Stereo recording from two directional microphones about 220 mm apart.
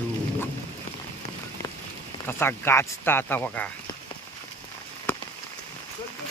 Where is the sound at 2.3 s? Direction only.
10° left (ahead or behind).